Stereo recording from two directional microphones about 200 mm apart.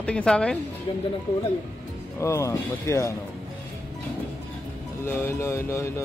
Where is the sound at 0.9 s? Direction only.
25° left (ahead or behind).